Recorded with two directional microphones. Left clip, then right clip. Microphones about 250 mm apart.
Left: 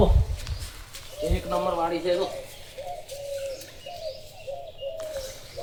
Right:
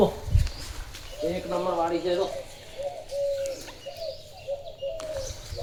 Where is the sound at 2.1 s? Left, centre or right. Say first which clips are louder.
Left 4 dB; left.